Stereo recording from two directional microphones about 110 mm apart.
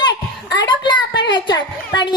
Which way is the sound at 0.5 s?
40° left (ahead or behind).